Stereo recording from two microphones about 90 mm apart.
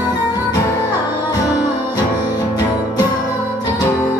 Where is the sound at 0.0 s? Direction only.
45° left (ahead or behind).